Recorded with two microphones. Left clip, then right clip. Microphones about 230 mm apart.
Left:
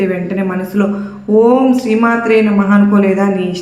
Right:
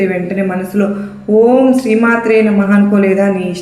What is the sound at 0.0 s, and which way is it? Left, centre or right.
A woman's voice, centre.